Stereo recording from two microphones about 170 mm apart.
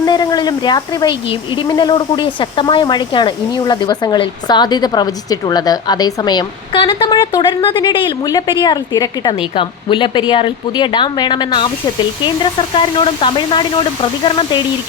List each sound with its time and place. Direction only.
0.0 s a woman's voice: 25° left (ahead or behind)